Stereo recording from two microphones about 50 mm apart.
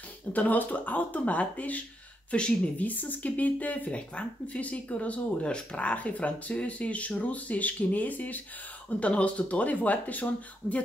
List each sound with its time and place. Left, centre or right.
0.3 s speech: left
2.3 s speech: left
2.8 s speech: left